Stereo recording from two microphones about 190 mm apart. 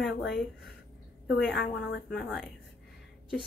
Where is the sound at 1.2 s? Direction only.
65° left (ahead or behind).